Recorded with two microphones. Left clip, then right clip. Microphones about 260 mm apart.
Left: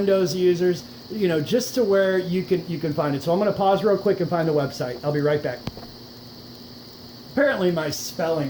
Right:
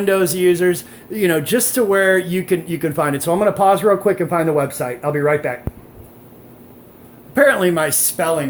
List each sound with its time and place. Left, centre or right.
0.0 s speech: right
7.3 s speech: right